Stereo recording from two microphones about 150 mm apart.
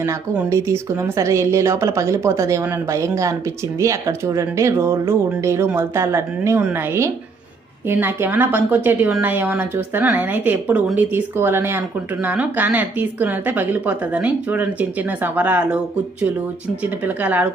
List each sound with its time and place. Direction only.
0.5 s a woman's voice: 20° right (ahead or behind)
16.8 s a woman's voice: 10° right (ahead or behind)